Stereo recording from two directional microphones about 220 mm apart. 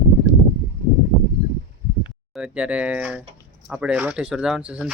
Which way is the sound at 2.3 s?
5° right (ahead or behind).